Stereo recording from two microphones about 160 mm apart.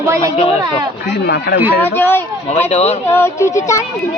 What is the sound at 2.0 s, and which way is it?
Music, 15° left (ahead or behind).